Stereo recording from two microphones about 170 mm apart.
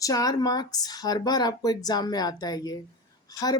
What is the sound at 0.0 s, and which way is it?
Speech, 20° left (ahead or behind).